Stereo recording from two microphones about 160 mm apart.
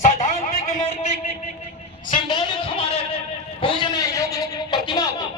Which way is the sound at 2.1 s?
30° left (ahead or behind).